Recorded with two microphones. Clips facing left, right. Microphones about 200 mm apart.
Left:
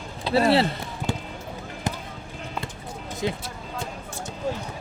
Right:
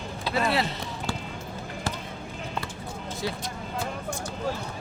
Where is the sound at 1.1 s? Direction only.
20° left (ahead or behind).